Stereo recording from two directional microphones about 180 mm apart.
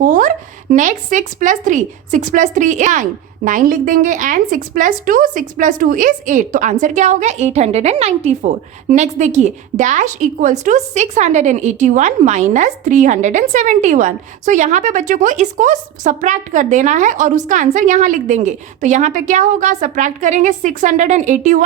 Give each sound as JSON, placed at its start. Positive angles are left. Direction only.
{"t": 0.0, "sound": "a woman's voice", "side_deg": -45}